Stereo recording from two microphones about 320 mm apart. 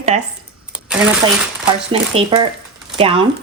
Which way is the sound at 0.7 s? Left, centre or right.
Centre.